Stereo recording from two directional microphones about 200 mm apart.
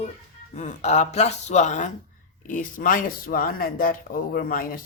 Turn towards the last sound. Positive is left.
turn(degrees=45)  # may be behind; listen again after turning